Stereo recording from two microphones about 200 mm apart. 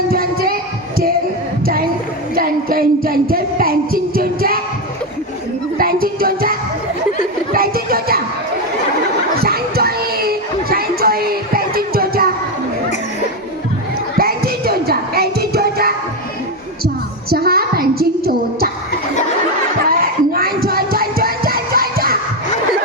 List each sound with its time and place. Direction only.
0.1 s music: 50° right (ahead or behind)
2.3 s music: 45° right (ahead or behind)
5.7 s music: 45° right (ahead or behind)
9.4 s a sound: 50° right (ahead or behind)
14.2 s music: 50° right (ahead or behind)
16.8 s a sound: 50° right (ahead or behind)
19.9 s music: 50° right (ahead or behind)